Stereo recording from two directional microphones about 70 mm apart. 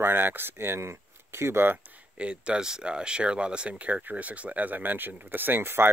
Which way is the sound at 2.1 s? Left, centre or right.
Centre.